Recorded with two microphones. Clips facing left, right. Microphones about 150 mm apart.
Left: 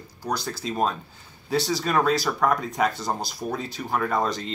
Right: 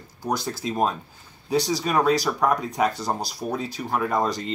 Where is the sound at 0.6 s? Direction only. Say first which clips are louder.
Even; 5° right (ahead or behind).